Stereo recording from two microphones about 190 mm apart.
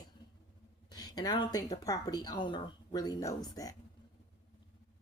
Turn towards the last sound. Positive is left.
turn(degrees=20)  # may be behind; listen again after turning